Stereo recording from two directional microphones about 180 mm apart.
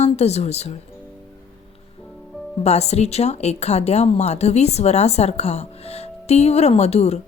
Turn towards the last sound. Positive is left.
turn(degrees=35)  # may be behind; listen again after turning